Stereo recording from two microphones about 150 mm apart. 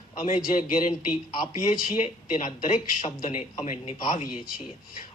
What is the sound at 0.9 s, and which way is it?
Speech, 30° left (ahead or behind).